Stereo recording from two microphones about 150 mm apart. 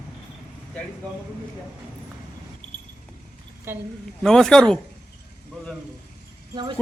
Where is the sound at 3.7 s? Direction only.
15° right (ahead or behind).